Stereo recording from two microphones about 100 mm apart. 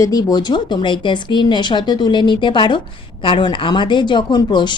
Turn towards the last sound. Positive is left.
turn(degrees=50)  # may be behind; listen again after turning